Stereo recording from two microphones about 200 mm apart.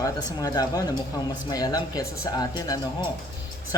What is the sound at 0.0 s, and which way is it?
Speech, 20° left (ahead or behind).